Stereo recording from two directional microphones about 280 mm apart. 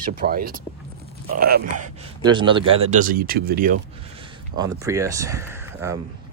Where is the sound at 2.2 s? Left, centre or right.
Centre.